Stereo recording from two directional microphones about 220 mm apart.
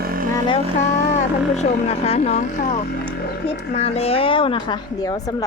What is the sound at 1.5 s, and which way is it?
Speech, 30° left (ahead or behind).